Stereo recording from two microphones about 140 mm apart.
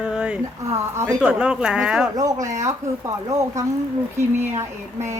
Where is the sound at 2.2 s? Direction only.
25° right (ahead or behind).